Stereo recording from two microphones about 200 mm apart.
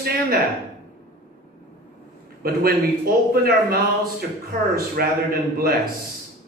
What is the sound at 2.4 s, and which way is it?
Speech, 50° right (ahead or behind).